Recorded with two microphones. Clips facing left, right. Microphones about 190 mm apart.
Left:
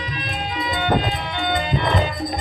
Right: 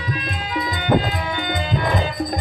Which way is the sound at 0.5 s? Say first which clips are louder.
Right 2 dB; 45° right (ahead or behind).